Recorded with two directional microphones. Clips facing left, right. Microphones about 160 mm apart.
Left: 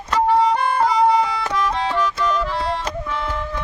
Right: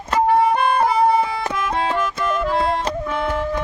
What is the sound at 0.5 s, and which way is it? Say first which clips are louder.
Music: right 1 dB; 55° right (ahead or behind).